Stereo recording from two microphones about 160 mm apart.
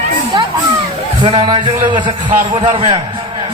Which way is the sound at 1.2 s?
30° right (ahead or behind).